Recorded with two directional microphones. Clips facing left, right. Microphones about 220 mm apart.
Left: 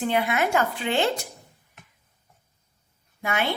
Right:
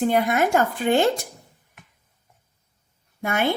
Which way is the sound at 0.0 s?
45° right (ahead or behind).